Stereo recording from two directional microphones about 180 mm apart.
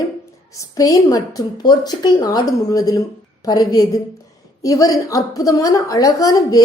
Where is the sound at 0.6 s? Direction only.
20° left (ahead or behind).